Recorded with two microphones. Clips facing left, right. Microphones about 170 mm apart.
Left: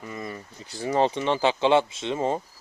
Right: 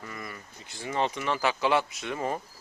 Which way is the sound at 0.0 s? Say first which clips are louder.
Left 5 dB; 25° left (ahead or behind).